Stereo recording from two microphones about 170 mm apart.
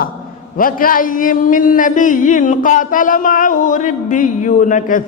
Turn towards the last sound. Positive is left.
turn(degrees=50)  # may be behind; listen again after turning